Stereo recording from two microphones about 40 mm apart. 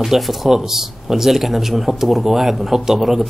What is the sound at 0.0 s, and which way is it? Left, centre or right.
Speech, centre.